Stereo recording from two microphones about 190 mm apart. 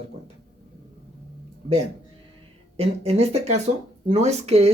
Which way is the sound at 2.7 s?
30° right (ahead or behind).